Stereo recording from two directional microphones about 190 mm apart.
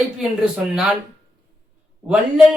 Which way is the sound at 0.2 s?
Centre (ahead or behind).